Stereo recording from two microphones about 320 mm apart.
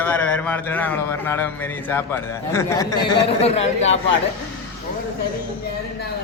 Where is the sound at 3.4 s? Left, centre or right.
Centre.